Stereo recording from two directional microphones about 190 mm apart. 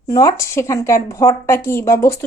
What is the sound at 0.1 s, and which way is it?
A woman's voice, 20° left (ahead or behind).